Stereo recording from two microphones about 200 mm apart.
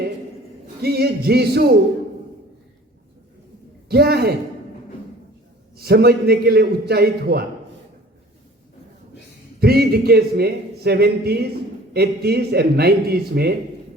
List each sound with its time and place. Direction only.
0.8 s a man's voice: 55° right (ahead or behind)
3.8 s a man's voice: 55° right (ahead or behind)
5.8 s a man's voice: 55° right (ahead or behind)
9.6 s a man's voice: 50° right (ahead or behind)